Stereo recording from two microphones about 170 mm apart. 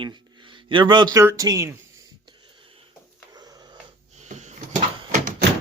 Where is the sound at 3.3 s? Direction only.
25° right (ahead or behind).